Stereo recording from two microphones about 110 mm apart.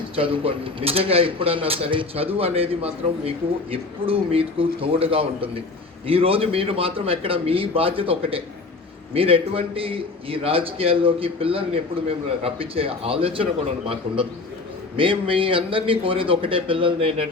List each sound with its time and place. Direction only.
0.2 s a man's voice: 55° right (ahead or behind)